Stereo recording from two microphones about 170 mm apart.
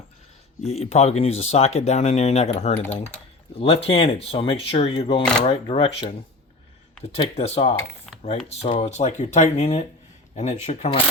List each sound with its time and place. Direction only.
0.6 s speech: 40° left (ahead or behind)
7.3 s speech: 35° left (ahead or behind)